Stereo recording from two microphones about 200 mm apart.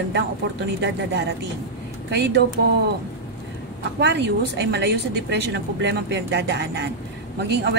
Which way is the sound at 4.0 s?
60° right (ahead or behind).